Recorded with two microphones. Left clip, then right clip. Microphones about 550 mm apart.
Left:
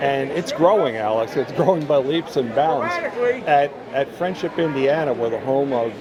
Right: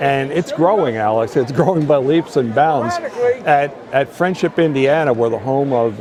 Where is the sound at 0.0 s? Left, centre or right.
Right.